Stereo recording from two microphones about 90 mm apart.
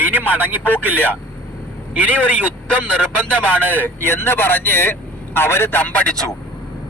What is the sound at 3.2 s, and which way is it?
Speech, 15° left (ahead or behind).